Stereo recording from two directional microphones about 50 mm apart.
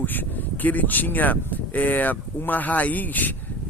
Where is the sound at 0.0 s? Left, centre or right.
Left.